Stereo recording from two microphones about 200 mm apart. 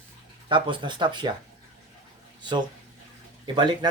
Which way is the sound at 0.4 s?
25° right (ahead or behind).